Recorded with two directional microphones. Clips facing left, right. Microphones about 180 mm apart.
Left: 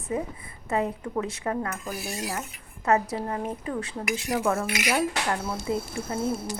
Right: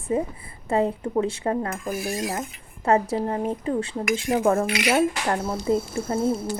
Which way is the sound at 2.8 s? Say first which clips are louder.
Right 3 dB; 30° right (ahead or behind).